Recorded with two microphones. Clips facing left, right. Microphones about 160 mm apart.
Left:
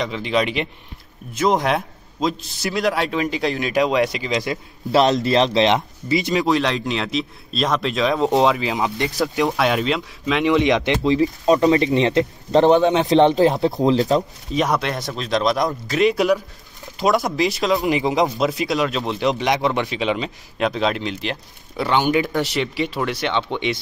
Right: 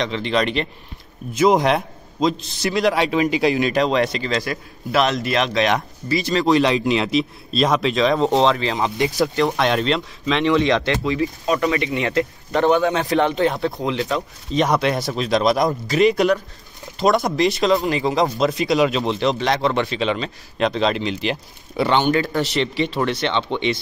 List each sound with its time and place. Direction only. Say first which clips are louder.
0.0 s a man's voice: even; 5° left (ahead or behind)
6.4 s a man's voice: right 3 dB; centre (ahead or behind)
10.5 s speech: left 1 dB; 15° left (ahead or behind)
11.5 s a man's voice: left 6 dB; 30° left (ahead or behind)
14.5 s a man's voice: right 2 dB; centre (ahead or behind)
17.8 s speech: left 1 dB; 15° left (ahead or behind)
18.2 s a man's voice: right 1 dB; centre (ahead or behind)
19.3 s speech: even; 15° left (ahead or behind)